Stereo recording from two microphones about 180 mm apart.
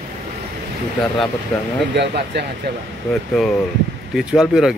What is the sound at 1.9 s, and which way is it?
Speech, 70° right (ahead or behind).